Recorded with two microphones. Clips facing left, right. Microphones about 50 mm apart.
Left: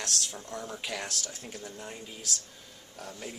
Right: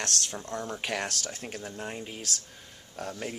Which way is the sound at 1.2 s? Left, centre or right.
Right.